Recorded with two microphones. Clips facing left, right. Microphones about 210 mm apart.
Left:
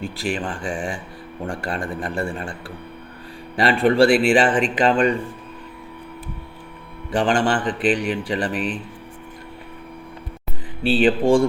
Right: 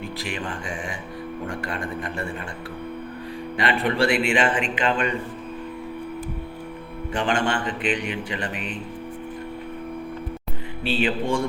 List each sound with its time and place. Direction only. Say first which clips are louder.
0.2 s a man's voice: left 7 dB; 30° left (ahead or behind)
3.5 s a man's voice: left 6 dB; 35° left (ahead or behind)
7.1 s a man's voice: left 5 dB; 35° left (ahead or behind)
10.8 s a man's voice: left 7 dB; 35° left (ahead or behind)